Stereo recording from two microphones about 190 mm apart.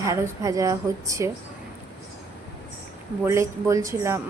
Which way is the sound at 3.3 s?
15° right (ahead or behind).